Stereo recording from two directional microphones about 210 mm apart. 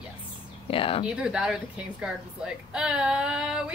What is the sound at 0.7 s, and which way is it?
Speech, 25° left (ahead or behind).